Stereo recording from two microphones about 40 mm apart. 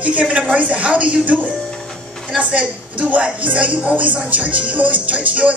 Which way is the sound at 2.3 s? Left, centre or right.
Right.